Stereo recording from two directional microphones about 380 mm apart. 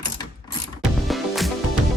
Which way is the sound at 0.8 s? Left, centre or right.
Centre.